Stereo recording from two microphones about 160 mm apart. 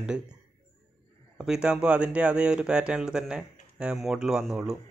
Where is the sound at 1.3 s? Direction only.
5° right (ahead or behind).